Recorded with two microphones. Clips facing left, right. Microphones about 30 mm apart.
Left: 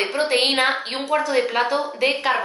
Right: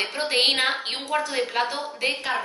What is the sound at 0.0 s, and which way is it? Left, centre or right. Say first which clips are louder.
Speech: left 5 dB; centre.